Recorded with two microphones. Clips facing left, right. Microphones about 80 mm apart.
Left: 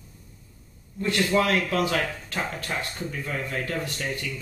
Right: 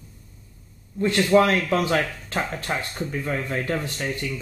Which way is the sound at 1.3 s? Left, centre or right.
Right.